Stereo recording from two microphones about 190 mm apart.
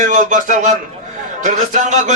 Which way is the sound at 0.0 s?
40° right (ahead or behind).